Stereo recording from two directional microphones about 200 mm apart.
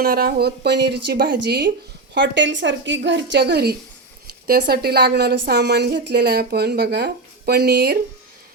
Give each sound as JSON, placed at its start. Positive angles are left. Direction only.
{"t": 0.0, "sound": "a woman's voice", "side_deg": -50}